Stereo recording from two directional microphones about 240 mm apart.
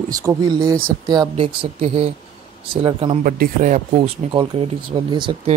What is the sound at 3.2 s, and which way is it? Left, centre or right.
Speech, right.